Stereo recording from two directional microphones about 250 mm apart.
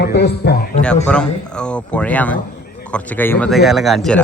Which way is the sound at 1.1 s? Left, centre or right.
Centre.